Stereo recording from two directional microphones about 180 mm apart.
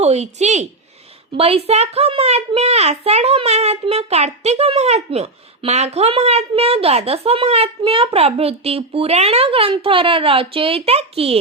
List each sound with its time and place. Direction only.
0.0 s a child's voice: 35° right (ahead or behind)